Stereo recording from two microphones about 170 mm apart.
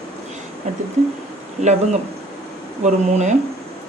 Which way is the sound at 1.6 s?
40° right (ahead or behind).